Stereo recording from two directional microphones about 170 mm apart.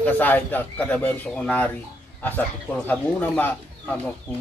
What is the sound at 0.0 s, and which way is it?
Speech, 10° left (ahead or behind).